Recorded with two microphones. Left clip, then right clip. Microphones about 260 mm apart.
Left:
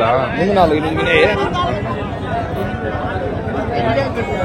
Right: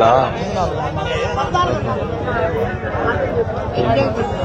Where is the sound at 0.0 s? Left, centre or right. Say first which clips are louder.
Right 1 dB; left.